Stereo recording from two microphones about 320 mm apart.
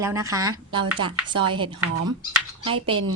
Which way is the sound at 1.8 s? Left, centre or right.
Right.